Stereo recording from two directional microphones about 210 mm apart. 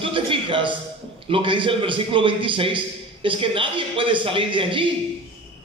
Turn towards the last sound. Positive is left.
turn(degrees=-25)  # may be behind; listen again after turning